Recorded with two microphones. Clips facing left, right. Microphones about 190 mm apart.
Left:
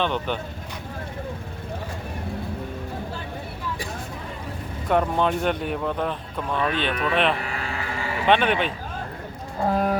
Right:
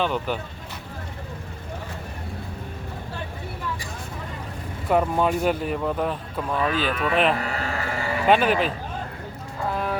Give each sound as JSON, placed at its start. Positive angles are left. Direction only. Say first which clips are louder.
{"t": 0.0, "sound": "speech", "louder": "even", "side_deg": -5}
{"t": 4.9, "sound": "speech", "louder": "right 1 dB", "side_deg": -5}
{"t": 7.4, "sound": "a sound", "louder": "right 3 dB", "side_deg": -40}
{"t": 8.3, "sound": "speech", "louder": "right 1 dB", "side_deg": -5}
{"t": 9.7, "sound": "music", "louder": "left 4 dB", "side_deg": 40}